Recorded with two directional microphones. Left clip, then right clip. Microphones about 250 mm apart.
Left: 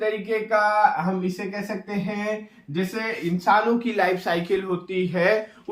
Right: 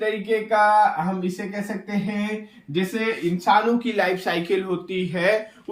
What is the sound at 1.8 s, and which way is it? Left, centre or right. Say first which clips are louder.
Speech: left 1 dB; centre.